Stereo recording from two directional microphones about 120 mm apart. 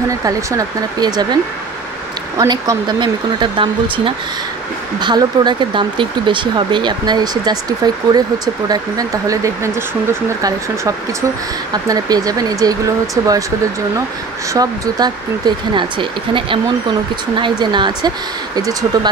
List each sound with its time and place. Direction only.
0.2 s speech: 30° right (ahead or behind)
5.0 s speech: 40° right (ahead or behind)
11.7 s speech: 30° right (ahead or behind)
14.5 s speech: 35° right (ahead or behind)